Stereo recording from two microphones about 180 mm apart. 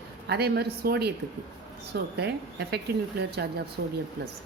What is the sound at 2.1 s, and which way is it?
Speech, 65° right (ahead or behind).